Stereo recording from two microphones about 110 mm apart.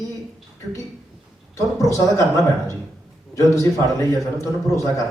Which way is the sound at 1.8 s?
30° left (ahead or behind).